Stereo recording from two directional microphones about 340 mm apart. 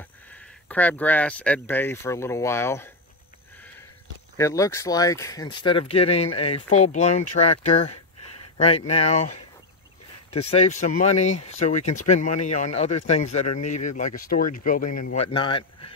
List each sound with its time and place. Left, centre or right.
0.0 s speech: centre
4.4 s speech: centre